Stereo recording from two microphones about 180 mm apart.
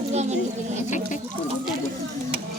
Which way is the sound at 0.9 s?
45° left (ahead or behind).